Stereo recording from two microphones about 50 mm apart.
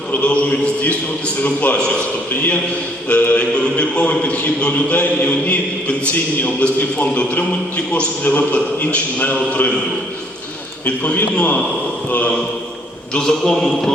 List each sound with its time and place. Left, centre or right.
0.2 s a man's voice: left
3.1 s a man's voice: left
3.3 s a man's voice: left
10.8 s a man's voice: left
13.1 s a man's voice: centre